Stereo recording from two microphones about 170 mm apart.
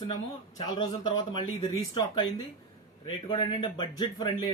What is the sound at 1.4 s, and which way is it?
Speech, 35° left (ahead or behind).